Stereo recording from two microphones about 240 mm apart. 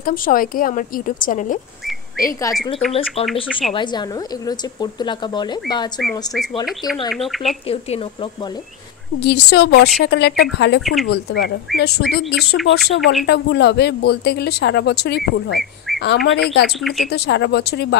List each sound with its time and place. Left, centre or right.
0.0 s a woman's voice: left
2.5 s speech: centre
3.7 s speech: centre
5.9 s speech: centre
7.6 s speech: left
9.2 s speech: left
10.8 s speech: centre
11.1 s speech: left
16.8 s speech: centre
17.1 s speech: left